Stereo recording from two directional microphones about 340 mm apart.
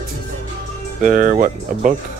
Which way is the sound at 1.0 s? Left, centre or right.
Right.